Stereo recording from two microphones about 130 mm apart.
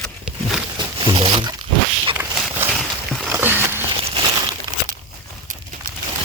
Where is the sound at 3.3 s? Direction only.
15° right (ahead or behind).